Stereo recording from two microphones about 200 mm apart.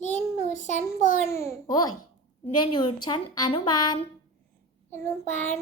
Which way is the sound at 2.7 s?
25° left (ahead or behind).